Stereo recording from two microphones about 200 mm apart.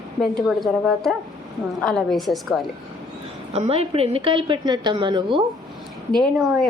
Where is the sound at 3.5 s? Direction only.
30° right (ahead or behind).